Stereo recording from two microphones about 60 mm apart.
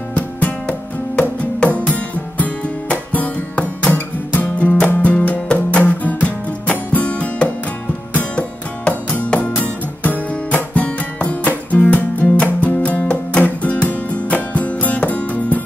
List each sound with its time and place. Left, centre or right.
0.1 s music: left
9.3 s music: left